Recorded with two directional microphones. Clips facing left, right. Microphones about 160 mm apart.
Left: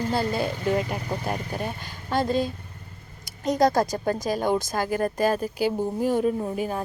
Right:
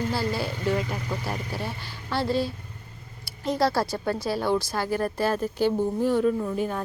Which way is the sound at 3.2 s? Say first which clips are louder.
Left 3 dB; 20° left (ahead or behind).